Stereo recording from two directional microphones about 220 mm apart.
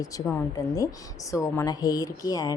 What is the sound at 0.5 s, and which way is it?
A woman's voice, 15° left (ahead or behind).